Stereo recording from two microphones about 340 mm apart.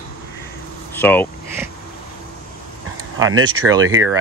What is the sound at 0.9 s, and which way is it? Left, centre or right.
Speech, centre.